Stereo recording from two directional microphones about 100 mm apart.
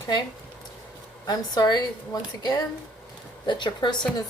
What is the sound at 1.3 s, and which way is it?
A woman's voice, 40° left (ahead or behind).